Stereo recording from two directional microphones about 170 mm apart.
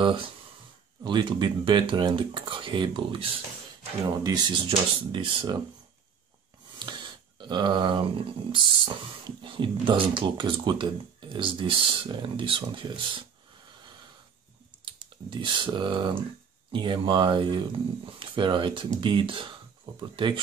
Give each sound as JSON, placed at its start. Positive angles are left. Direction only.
{"t": 0.0, "sound": "speech", "side_deg": -30}
{"t": 6.8, "sound": "a sound", "side_deg": -25}
{"t": 8.5, "sound": "speech", "side_deg": -30}
{"t": 15.2, "sound": "speech", "side_deg": -30}